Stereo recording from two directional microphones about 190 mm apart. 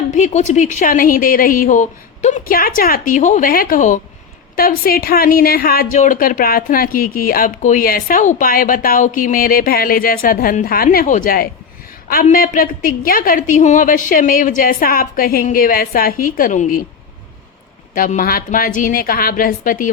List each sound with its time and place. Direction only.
0.1 s a woman's voice: 40° left (ahead or behind)
17.9 s a woman's voice: 45° left (ahead or behind)